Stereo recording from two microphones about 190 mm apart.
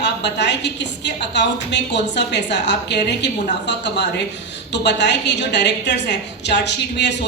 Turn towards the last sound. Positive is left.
turn(degrees=65)  # may be behind; listen again after turning